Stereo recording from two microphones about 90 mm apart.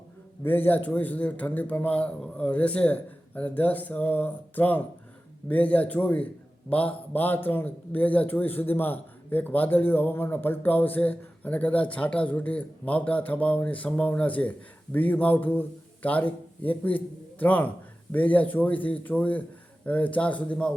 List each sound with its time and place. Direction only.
0.4 s a man's voice: 20° left (ahead or behind)